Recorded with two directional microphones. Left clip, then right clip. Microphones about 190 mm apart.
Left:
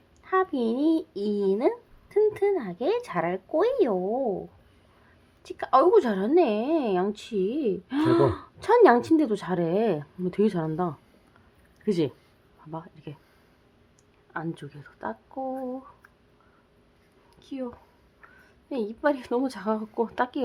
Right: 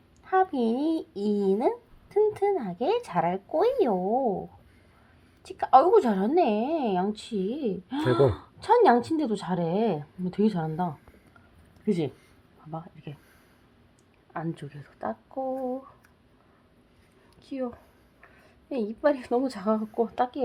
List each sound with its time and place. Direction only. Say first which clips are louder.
0.3 s a child's voice: right 1 dB; 5° left (ahead or behind)
5.4 s a child's voice: right 2 dB; 5° left (ahead or behind)
12.7 s speech: left 1 dB; 5° left (ahead or behind)
14.3 s a woman's voice: left 1 dB; centre (ahead or behind)
17.4 s a woman's voice: right 2 dB; 5° right (ahead or behind)
19.9 s a child's voice: even; 10° left (ahead or behind)